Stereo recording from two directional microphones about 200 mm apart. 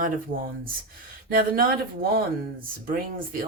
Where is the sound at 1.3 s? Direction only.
45° right (ahead or behind).